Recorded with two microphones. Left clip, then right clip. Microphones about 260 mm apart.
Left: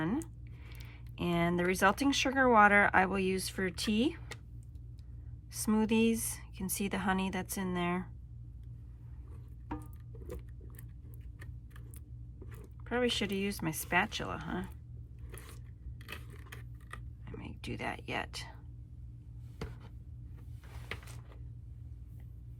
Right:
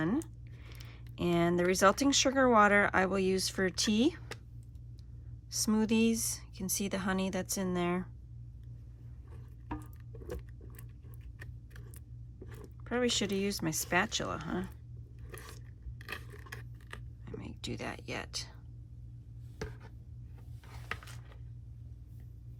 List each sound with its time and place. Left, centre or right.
0.0 s a sound: centre
0.9 s speech: centre
5.5 s speech: centre
12.8 s speech: centre
16.3 s scissors: right
17.2 s speech: centre